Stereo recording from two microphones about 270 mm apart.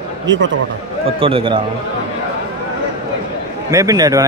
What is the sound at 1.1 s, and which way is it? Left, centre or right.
Speech, centre.